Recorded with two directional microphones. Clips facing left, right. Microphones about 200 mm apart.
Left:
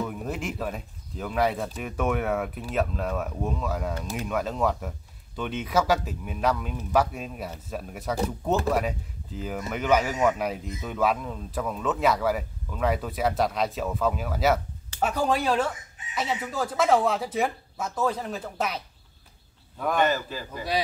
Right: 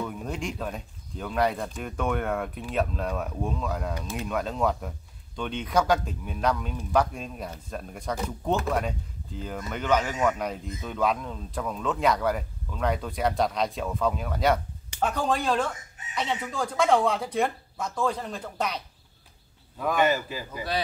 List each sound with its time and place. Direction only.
0.0 s speech: 5° left (ahead or behind)
19.8 s a man's voice: 5° right (ahead or behind)